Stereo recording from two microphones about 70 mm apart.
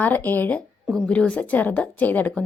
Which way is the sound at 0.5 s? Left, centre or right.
Centre.